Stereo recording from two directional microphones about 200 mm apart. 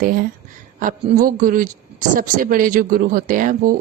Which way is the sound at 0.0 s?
45° right (ahead or behind).